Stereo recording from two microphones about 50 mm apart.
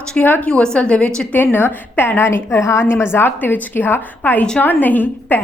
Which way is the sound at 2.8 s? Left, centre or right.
Left.